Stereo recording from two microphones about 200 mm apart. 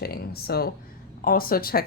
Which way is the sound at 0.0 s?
50° left (ahead or behind).